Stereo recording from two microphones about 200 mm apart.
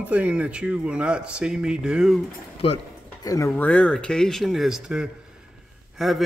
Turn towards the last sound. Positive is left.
turn(degrees=0)  # may be behind; listen again after turning